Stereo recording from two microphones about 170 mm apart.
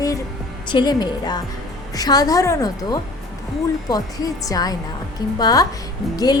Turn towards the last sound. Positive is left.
turn(degrees=20)  # may be behind; listen again after turning